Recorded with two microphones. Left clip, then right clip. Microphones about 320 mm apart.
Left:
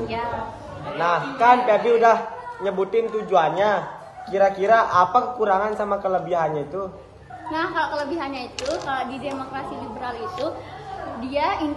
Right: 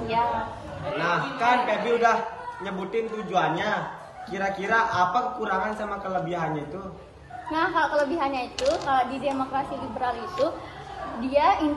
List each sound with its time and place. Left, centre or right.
0.9 s a man's voice: centre
7.5 s a woman's voice: centre
11.3 s a woman's voice: centre